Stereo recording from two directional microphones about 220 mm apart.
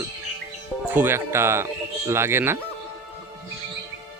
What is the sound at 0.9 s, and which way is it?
Speech, 10° right (ahead or behind).